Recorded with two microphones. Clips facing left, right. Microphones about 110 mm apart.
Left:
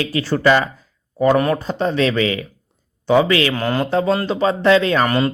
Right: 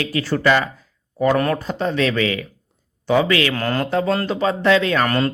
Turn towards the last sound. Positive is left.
turn(degrees=10)  # may be behind; listen again after turning